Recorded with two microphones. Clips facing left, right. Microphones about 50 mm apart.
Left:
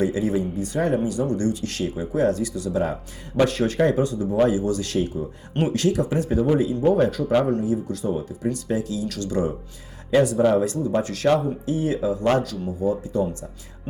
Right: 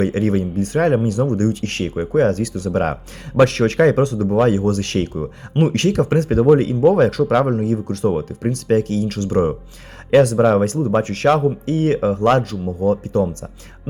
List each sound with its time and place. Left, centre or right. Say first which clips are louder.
0.0 s speech: right 4 dB; right
5.6 s speech: right 4 dB; right
9.0 s speech: right 6 dB; right
10.1 s speech: right 5 dB; right
11.6 s speech: right 6 dB; right
12.9 s speech: right 7 dB; right